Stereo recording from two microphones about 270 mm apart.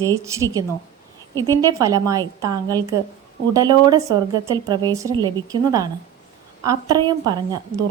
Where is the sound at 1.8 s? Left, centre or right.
Centre.